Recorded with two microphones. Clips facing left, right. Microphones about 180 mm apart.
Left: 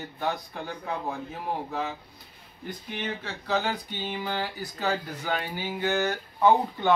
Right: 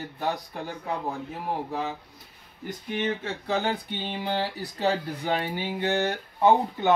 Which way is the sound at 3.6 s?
30° right (ahead or behind).